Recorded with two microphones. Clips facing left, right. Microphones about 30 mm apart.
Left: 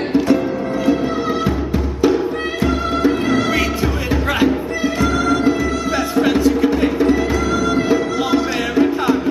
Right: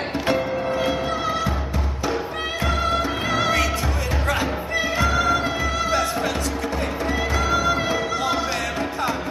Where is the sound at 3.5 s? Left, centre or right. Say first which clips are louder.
Left 4 dB; centre.